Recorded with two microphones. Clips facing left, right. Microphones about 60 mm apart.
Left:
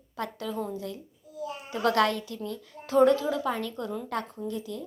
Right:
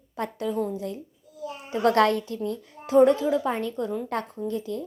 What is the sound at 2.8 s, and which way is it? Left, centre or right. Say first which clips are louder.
Speech: right 3 dB; right.